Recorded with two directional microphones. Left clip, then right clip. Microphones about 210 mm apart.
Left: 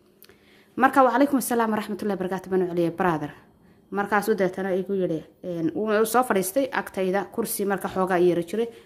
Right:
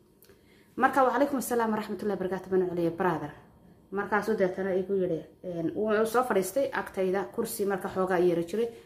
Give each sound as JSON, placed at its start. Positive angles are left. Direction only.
{"t": 0.7, "sound": "a woman's voice", "side_deg": 45}